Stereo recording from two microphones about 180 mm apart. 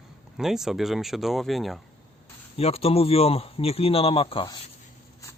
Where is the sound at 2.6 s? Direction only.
35° left (ahead or behind).